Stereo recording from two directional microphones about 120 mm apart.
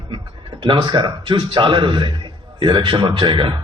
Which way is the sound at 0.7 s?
40° right (ahead or behind).